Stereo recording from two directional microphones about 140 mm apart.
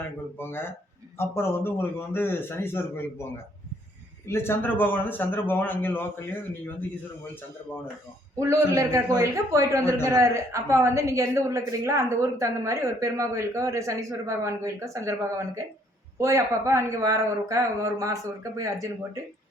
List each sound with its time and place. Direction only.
0.3 s a man's voice: 15° left (ahead or behind)
8.4 s a woman's voice: 20° right (ahead or behind)